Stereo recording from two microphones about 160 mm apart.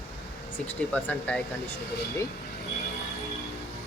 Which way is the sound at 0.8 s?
10° left (ahead or behind).